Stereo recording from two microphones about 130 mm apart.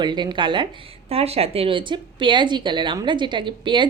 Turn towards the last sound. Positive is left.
turn(degrees=-35)  # may be behind; listen again after turning